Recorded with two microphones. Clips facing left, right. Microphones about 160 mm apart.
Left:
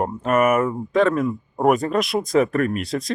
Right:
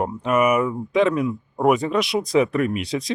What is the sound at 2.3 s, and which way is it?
Speech, 45° left (ahead or behind).